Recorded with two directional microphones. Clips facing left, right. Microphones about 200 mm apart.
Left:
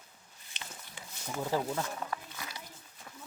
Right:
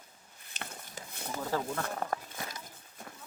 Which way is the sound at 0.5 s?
50° right (ahead or behind).